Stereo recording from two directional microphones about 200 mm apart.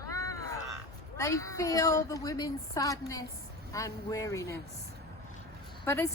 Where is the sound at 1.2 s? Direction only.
15° left (ahead or behind).